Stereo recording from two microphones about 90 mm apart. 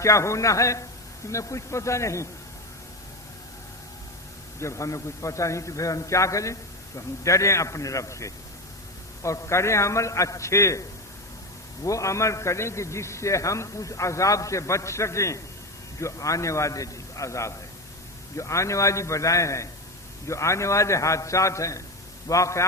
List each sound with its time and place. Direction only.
0.0 s a man's voice: 35° left (ahead or behind)
4.6 s a man's voice: 35° left (ahead or behind)